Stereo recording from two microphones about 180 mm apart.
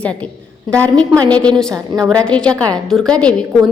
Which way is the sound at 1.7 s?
20° right (ahead or behind).